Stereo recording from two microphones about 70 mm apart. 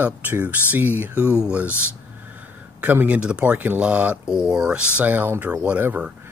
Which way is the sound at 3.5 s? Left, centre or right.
Right.